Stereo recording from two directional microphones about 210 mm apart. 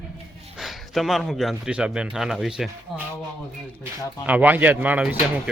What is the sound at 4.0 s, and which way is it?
Speech, 20° left (ahead or behind).